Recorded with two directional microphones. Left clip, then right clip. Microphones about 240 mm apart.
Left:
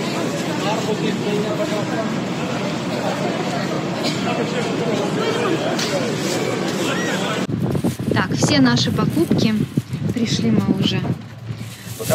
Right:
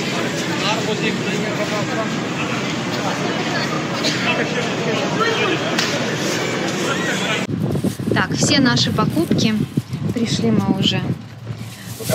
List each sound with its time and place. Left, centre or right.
8.1 s speech: centre